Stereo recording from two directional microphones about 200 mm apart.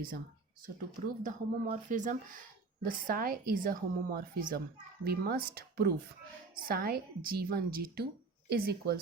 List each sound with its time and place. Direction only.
0.9 s a woman's voice: 40° right (ahead or behind)